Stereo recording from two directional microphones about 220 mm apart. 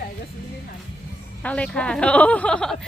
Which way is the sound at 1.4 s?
5° left (ahead or behind).